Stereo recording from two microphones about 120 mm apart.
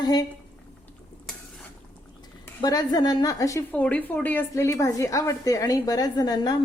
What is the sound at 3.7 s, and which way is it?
A woman's voice, 10° left (ahead or behind).